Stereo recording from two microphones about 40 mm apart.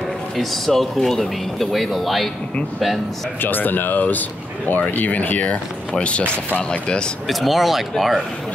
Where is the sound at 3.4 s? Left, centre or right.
Left.